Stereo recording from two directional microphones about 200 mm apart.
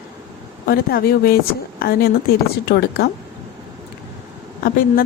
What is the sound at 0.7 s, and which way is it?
Speech, 50° left (ahead or behind).